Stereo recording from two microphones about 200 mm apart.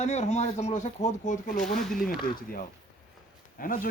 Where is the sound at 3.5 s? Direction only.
45° left (ahead or behind).